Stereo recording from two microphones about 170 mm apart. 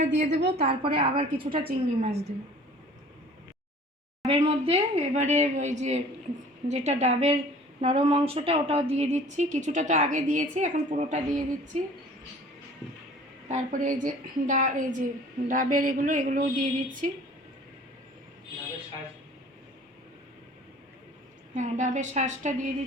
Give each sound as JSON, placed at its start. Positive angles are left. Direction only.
{"t": 0.0, "sound": "a woman's voice", "side_deg": -45}
{"t": 4.3, "sound": "a woman's voice", "side_deg": -35}
{"t": 13.5, "sound": "a woman's voice", "side_deg": -50}
{"t": 21.5, "sound": "a woman's voice", "side_deg": -45}